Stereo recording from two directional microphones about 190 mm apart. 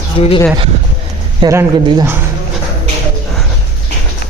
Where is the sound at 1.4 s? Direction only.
20° right (ahead or behind).